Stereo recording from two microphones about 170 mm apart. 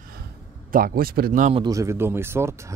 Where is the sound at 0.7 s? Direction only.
60° right (ahead or behind).